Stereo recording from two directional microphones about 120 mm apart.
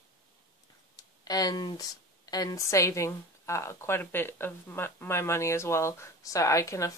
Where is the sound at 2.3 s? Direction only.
35° left (ahead or behind).